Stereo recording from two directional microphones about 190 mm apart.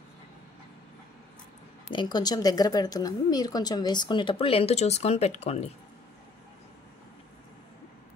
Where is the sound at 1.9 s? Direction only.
25° left (ahead or behind).